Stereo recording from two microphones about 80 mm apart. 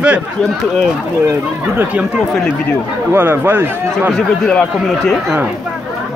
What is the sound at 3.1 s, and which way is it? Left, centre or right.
Speech, right.